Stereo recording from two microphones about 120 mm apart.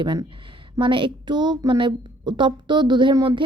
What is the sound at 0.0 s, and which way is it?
A woman's voice, 40° right (ahead or behind).